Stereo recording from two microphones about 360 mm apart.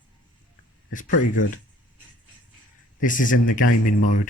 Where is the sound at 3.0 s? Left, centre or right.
Left.